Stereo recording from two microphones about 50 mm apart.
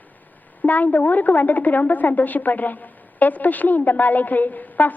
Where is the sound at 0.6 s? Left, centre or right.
Left.